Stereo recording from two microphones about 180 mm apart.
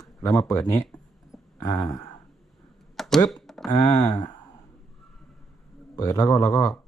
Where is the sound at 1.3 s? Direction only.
20° left (ahead or behind).